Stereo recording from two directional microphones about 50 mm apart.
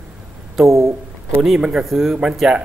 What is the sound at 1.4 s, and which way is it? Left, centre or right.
Speech, centre.